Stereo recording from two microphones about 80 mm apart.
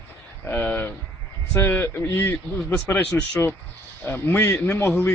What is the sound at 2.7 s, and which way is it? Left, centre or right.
Speech, centre.